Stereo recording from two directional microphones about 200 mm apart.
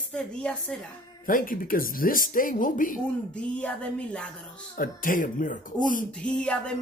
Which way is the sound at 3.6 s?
5° left (ahead or behind).